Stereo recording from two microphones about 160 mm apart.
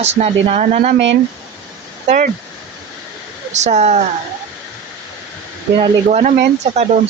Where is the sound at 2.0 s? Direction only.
60° right (ahead or behind).